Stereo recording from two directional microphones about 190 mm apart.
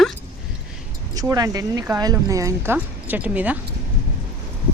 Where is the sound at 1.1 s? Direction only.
20° right (ahead or behind).